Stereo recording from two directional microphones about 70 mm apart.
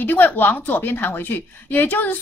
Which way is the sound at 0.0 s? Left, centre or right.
Left.